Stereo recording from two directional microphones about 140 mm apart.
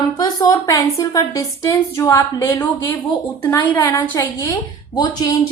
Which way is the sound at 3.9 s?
25° left (ahead or behind).